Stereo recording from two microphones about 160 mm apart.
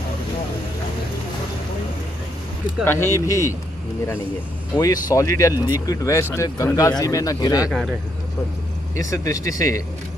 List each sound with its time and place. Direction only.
2.8 s speech: 15° left (ahead or behind)
4.7 s speech: 20° left (ahead or behind)
8.9 s speech: 20° left (ahead or behind)